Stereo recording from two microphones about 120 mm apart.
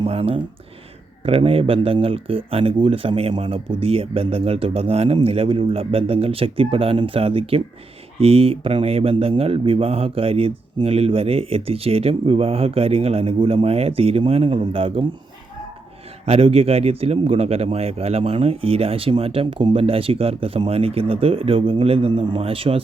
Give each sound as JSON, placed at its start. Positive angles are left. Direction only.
{"t": 0.0, "sound": "speech", "side_deg": -50}
{"t": 16.2, "sound": "speech", "side_deg": -55}